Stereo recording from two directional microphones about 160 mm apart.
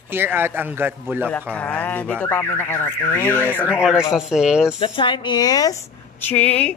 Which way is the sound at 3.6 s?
5° right (ahead or behind).